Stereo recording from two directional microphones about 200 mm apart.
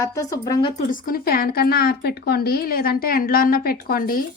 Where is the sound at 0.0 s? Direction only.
15° left (ahead or behind).